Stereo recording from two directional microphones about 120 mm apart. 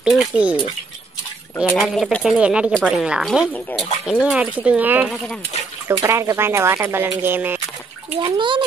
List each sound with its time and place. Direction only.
0.0 s speech: centre (ahead or behind)
0.3 s speech: 10° right (ahead or behind)
1.8 s speech: centre (ahead or behind); by 7.6 s 15° right (ahead or behind)
8.2 s a child's voice: 45° right (ahead or behind)